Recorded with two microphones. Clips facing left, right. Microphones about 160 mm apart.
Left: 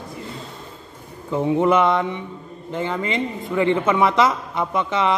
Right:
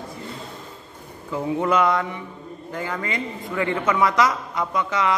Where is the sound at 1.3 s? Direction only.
25° left (ahead or behind).